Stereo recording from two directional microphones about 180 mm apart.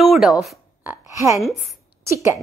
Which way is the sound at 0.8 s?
15° right (ahead or behind).